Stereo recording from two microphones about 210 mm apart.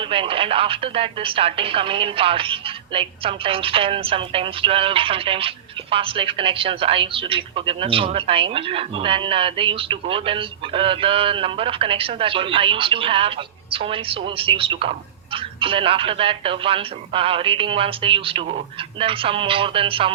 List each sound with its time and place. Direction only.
0.0 s speech: 25° right (ahead or behind)